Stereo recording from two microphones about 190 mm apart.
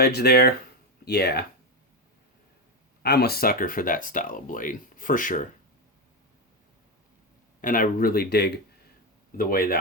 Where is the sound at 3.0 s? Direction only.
55° left (ahead or behind).